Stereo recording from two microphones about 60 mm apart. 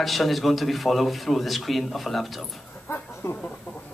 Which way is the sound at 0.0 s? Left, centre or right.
Centre.